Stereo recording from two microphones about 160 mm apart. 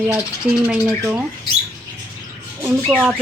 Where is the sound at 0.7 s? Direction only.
5° right (ahead or behind).